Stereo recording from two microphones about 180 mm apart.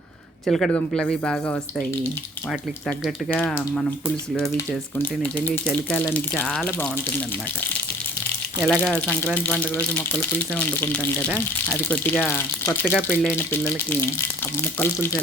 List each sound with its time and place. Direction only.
0.4 s speech: centre (ahead or behind)
4.9 s speech: 5° left (ahead or behind)
8.6 s speech: centre (ahead or behind)